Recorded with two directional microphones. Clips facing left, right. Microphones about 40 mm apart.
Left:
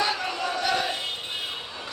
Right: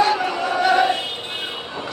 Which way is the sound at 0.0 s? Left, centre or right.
Centre.